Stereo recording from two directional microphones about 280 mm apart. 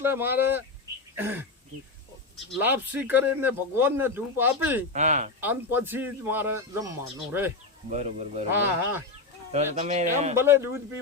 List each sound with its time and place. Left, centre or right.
0.0 s speech: centre
2.5 s speech: centre
4.9 s a man's voice: right
5.4 s speech: centre
7.9 s a man's voice: right
9.5 s a man's voice: right
10.3 s speech: centre